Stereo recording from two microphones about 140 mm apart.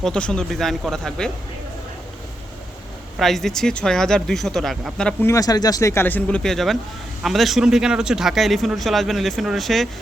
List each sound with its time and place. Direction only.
0.0 s a man's voice: 5° left (ahead or behind)
3.2 s a man's voice: centre (ahead or behind)
5.2 s a man's voice: 25° left (ahead or behind); by 9.9 s centre (ahead or behind)